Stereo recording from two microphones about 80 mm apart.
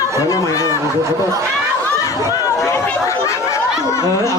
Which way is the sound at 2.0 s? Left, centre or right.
Left.